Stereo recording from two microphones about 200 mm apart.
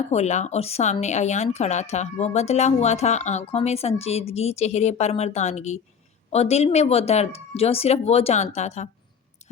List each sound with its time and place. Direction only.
0.1 s speech: 35° left (ahead or behind)